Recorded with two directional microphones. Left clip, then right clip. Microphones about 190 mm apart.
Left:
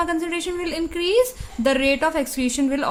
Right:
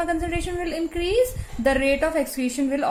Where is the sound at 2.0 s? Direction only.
40° left (ahead or behind).